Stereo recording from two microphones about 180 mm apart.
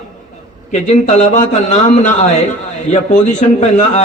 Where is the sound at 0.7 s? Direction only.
40° left (ahead or behind).